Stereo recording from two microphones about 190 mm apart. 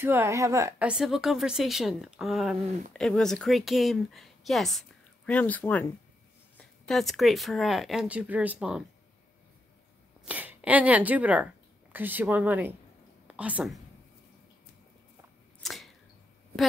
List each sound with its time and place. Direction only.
0.0 s speech: 15° right (ahead or behind)
10.2 s a woman's voice: 10° right (ahead or behind)
15.6 s a sound: centre (ahead or behind)